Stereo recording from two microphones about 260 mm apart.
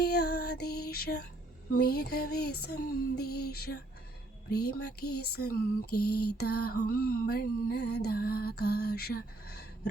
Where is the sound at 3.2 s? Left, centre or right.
Left.